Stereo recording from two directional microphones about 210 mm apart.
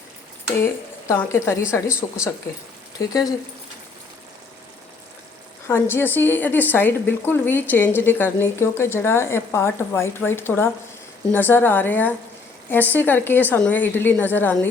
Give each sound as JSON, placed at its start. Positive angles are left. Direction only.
{"t": 0.6, "sound": "a woman's voice", "side_deg": 10}
{"t": 5.6, "sound": "a woman's voice", "side_deg": 10}